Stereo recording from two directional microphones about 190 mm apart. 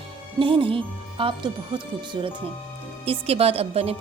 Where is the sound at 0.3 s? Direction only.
25° right (ahead or behind).